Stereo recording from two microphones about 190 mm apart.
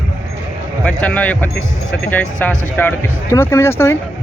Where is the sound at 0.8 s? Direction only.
5° left (ahead or behind).